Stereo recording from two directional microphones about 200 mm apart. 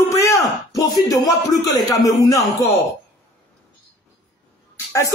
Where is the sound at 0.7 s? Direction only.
20° left (ahead or behind).